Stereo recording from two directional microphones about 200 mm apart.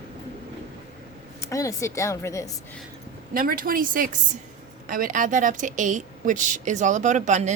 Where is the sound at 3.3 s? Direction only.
45° right (ahead or behind).